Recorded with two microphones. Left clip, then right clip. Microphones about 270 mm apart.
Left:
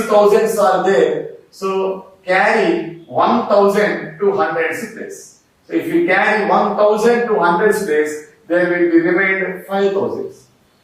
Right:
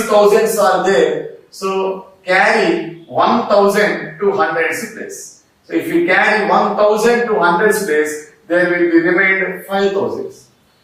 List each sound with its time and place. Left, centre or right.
0.0 s speech: centre